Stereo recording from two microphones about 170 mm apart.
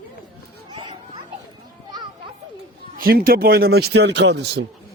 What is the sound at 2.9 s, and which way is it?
Speech, 60° right (ahead or behind).